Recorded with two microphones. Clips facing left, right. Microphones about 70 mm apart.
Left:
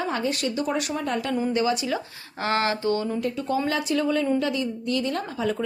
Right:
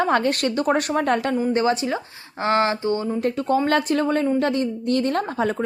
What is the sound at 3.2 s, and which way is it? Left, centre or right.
Speech, right.